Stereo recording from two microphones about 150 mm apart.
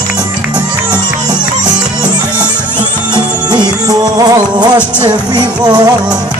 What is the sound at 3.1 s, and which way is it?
Music, 30° right (ahead or behind).